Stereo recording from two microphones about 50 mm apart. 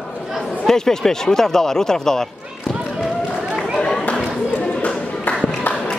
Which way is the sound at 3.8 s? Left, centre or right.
Left.